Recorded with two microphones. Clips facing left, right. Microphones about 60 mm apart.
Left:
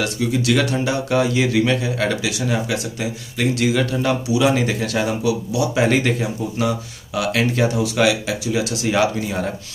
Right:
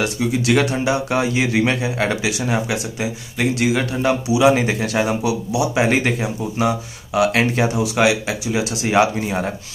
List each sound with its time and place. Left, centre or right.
0.0 s speech: centre